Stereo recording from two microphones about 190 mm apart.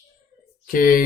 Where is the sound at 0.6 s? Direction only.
50° left (ahead or behind).